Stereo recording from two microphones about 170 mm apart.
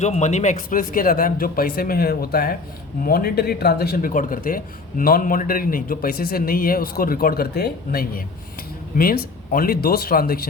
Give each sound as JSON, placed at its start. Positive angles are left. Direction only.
{"t": 0.0, "sound": "speech", "side_deg": 40}